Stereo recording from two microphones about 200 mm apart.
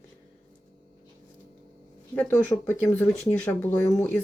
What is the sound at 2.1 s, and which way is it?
Speech, 10° left (ahead or behind).